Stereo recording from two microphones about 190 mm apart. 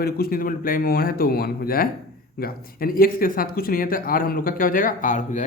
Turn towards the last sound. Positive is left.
turn(degrees=40)  # may be behind; listen again after turning